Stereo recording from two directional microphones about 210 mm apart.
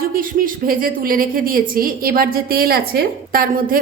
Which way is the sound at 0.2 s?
40° right (ahead or behind).